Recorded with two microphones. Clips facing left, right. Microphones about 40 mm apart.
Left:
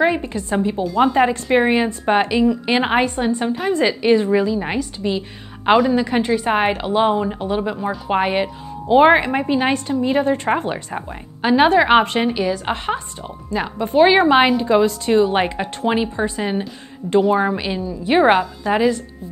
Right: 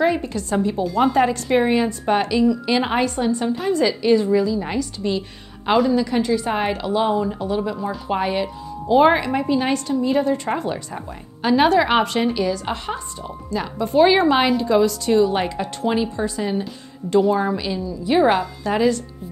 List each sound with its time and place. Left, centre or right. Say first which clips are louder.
0.0 s a woman's voice: left 2 dB; left
5.0 s a woman's voice: left 1 dB; centre
5.7 s a woman's voice: left 3 dB; left
18.4 s a woman's voice: left 2 dB; left